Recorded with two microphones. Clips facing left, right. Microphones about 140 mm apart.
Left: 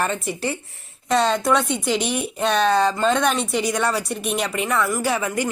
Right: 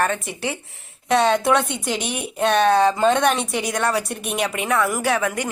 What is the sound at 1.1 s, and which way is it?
A woman's voice, 10° right (ahead or behind).